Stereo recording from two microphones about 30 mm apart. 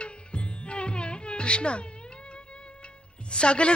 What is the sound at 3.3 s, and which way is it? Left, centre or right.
Speech, left.